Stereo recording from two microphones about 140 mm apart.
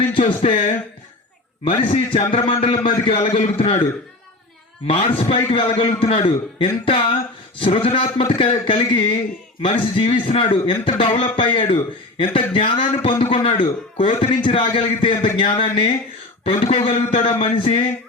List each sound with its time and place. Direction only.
0.0 s a man's voice: 40° left (ahead or behind)
5.1 s a man's voice: 40° left (ahead or behind)